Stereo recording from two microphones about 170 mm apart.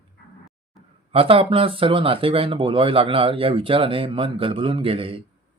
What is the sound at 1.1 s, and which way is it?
Speech, 35° right (ahead or behind).